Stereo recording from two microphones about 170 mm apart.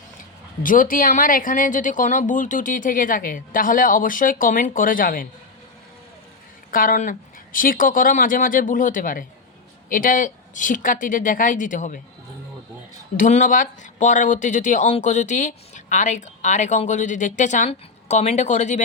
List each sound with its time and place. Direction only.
0.6 s speech: 50° left (ahead or behind)
6.7 s speech: 55° left (ahead or behind)
13.1 s speech: 50° left (ahead or behind)